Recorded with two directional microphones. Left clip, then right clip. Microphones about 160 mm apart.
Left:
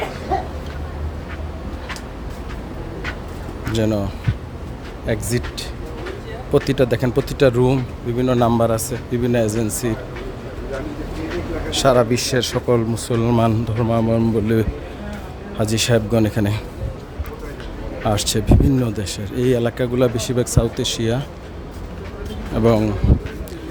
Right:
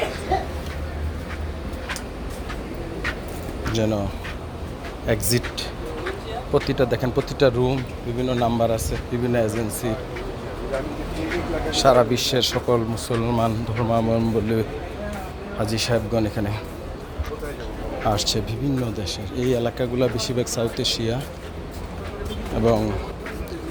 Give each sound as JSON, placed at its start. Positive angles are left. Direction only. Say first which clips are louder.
{"t": 3.7, "sound": "speech", "louder": "left 3 dB", "side_deg": 35}
{"t": 5.0, "sound": "speech", "louder": "even", "side_deg": 15}
{"t": 6.5, "sound": "speech", "louder": "left 4 dB", "side_deg": 45}
{"t": 11.7, "sound": "speech", "louder": "left 1 dB", "side_deg": 45}
{"t": 15.5, "sound": "speech", "louder": "left 5 dB", "side_deg": 50}
{"t": 18.0, "sound": "speech", "louder": "left 2 dB", "side_deg": 40}
{"t": 22.6, "sound": "speech", "louder": "left 4 dB", "side_deg": 50}